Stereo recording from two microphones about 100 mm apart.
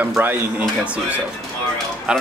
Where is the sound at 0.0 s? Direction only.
20° right (ahead or behind).